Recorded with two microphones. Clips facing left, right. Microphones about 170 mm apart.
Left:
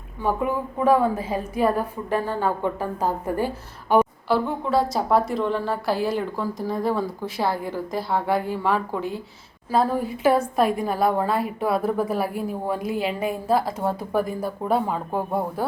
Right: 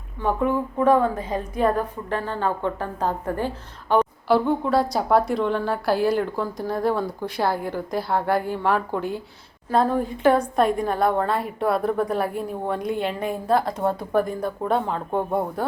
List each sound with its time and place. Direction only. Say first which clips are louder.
0.2 s a woman's voice: right 2 dB; 10° left (ahead or behind)